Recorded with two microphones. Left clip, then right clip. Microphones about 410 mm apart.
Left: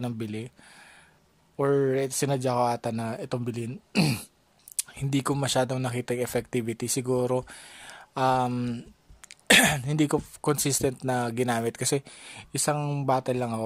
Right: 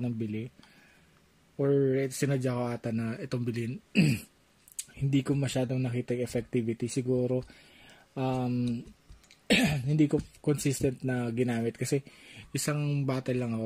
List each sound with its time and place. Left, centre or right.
0.0 s speech: left
2.1 s speech: centre
3.5 s speech: left
12.6 s speech: centre
13.3 s speech: left